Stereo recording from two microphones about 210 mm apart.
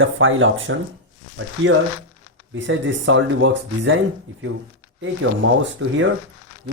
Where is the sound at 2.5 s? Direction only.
60° right (ahead or behind).